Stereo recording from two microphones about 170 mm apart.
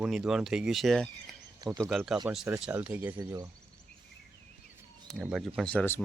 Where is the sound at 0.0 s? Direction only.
5° right (ahead or behind).